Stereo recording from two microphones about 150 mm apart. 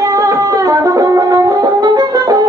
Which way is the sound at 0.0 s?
20° right (ahead or behind).